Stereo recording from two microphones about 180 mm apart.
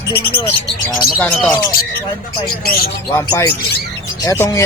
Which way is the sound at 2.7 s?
55° left (ahead or behind).